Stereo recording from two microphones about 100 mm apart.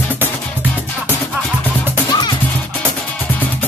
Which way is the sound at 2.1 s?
45° left (ahead or behind).